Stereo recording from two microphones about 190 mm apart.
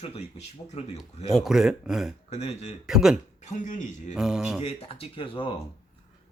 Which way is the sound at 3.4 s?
40° left (ahead or behind).